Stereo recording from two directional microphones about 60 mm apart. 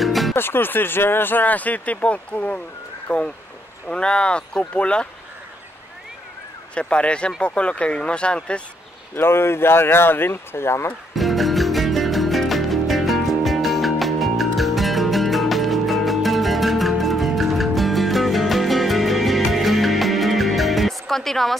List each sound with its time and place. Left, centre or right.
0.0 s music: centre
0.4 s speech: left; by 5.0 s centre
6.7 s speech: centre
9.1 s speech: left
11.1 s music: centre